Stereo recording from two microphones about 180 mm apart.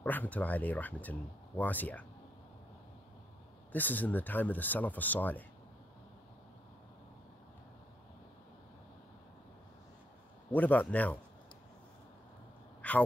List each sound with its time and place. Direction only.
0.0 s speech: 10° left (ahead or behind)
3.7 s speech: 10° left (ahead or behind)
10.5 s speech: 10° left (ahead or behind)
12.8 s gasp: 10° left (ahead or behind)